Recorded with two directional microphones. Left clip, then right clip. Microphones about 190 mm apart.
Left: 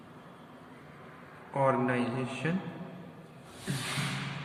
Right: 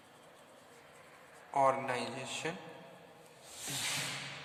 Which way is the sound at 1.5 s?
45° right (ahead or behind).